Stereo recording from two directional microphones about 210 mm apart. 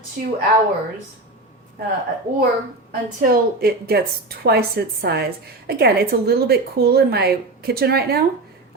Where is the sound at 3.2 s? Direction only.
45° right (ahead or behind).